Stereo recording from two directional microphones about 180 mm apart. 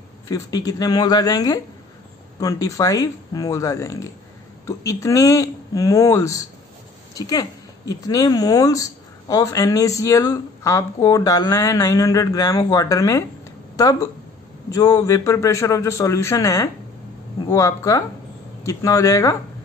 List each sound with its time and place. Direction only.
0.3 s a man's voice: 20° left (ahead or behind)
14.7 s a man's voice: 20° left (ahead or behind)